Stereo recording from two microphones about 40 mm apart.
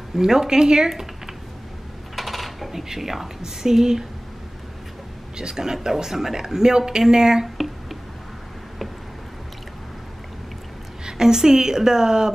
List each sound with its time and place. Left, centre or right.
0.1 s speech: centre
2.1 s speech: centre
5.4 s speech: centre
7.5 s a sound: centre
11.1 s speech: centre